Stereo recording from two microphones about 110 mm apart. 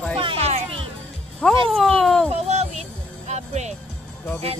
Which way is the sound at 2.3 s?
80° right.